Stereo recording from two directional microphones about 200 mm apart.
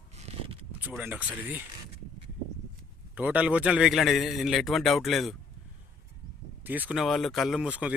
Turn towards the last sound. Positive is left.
turn(degrees=-5)  # may be behind; listen again after turning